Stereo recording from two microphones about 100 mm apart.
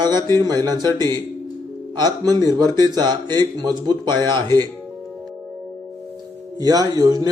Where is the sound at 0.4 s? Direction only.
40° right (ahead or behind).